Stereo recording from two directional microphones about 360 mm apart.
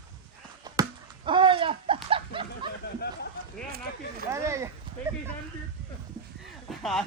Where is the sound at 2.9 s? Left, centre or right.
Left.